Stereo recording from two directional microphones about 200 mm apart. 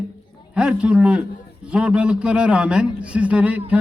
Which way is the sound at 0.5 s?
5° right (ahead or behind).